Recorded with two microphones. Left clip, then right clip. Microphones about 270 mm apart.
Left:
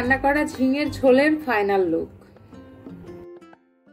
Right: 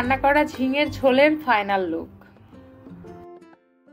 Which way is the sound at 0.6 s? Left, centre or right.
Right.